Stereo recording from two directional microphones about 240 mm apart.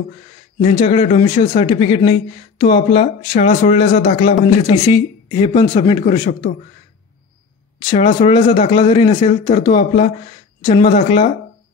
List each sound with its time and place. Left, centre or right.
0.6 s speech: left
4.6 s speech: centre
8.2 s speech: left